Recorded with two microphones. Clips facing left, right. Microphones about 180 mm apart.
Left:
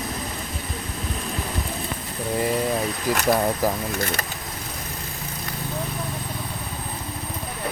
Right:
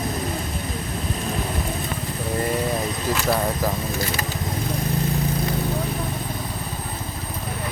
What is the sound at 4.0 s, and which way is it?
Speech, 55° left (ahead or behind).